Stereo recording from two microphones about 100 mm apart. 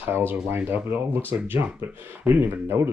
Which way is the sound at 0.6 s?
20° right (ahead or behind).